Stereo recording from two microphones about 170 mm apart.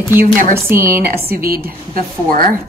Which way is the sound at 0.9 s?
60° right (ahead or behind).